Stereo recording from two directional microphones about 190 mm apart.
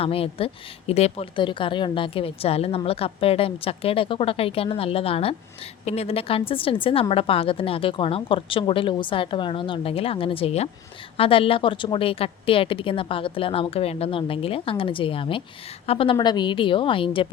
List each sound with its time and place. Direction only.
0.0 s a woman's voice: 30° left (ahead or behind)